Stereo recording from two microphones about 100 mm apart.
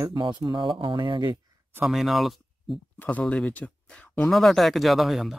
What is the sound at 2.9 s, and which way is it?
Speech, 15° left (ahead or behind).